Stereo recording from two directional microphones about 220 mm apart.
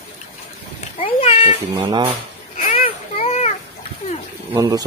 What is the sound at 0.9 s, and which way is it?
Cat, 25° left (ahead or behind).